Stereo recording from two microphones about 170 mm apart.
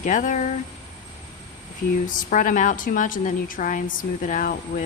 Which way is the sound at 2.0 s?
50° left (ahead or behind).